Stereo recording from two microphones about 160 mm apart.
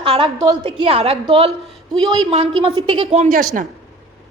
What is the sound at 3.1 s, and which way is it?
Speech, 45° right (ahead or behind).